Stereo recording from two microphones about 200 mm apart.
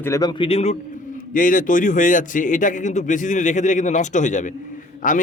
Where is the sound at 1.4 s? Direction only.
40° left (ahead or behind).